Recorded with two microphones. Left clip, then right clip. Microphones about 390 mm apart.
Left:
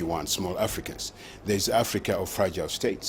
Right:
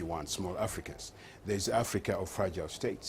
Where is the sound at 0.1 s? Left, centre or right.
Right.